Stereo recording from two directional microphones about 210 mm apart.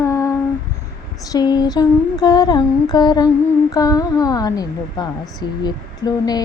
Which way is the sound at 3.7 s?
15° left (ahead or behind).